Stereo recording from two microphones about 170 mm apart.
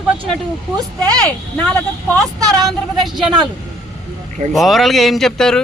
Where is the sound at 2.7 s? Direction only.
Centre (ahead or behind).